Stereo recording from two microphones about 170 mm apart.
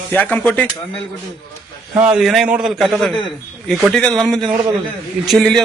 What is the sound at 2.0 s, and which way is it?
A man's voice, 5° right (ahead or behind).